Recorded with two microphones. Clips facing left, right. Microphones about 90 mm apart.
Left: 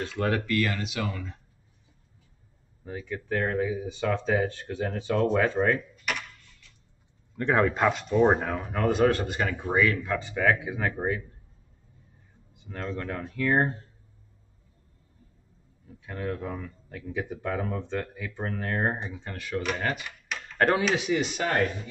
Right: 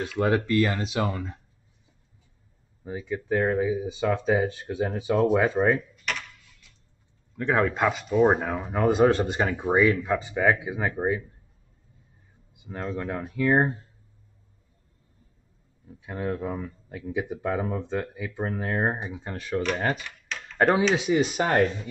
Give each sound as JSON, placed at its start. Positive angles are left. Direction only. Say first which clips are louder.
{"t": 0.0, "sound": "speech", "louder": "right 4 dB", "side_deg": -15}
{"t": 0.5, "sound": "speech", "louder": "right 4 dB", "side_deg": -25}
{"t": 2.8, "sound": "speech", "louder": "right 4 dB", "side_deg": -15}
{"t": 6.0, "sound": "a sound", "louder": "even", "side_deg": 5}
{"t": 7.3, "sound": "speech", "louder": "even", "side_deg": 0}
{"t": 8.5, "sound": "speech", "louder": "right 3 dB", "side_deg": -15}
{"t": 12.5, "sound": "speech", "louder": "right 2 dB", "side_deg": -15}
{"t": 16.1, "sound": "speech", "louder": "right 3 dB", "side_deg": -20}
{"t": 19.3, "sound": "speech", "louder": "right 3 dB", "side_deg": -30}
{"t": 20.9, "sound": "speech", "louder": "right 3 dB", "side_deg": -25}